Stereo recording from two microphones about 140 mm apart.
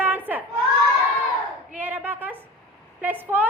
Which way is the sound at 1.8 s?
10° right (ahead or behind).